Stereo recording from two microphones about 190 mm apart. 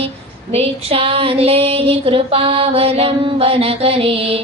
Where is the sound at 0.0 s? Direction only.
30° right (ahead or behind).